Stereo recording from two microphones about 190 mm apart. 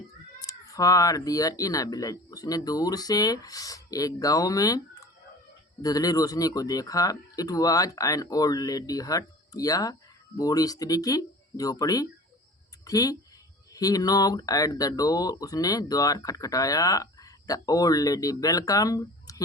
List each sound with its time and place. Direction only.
0.3 s speech: 20° left (ahead or behind)